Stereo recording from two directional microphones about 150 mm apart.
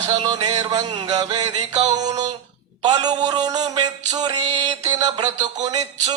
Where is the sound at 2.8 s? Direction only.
25° right (ahead or behind).